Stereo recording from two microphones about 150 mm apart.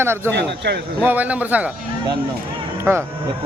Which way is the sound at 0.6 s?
90° right.